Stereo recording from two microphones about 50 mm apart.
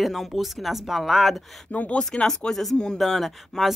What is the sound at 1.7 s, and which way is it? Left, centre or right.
Speech, left.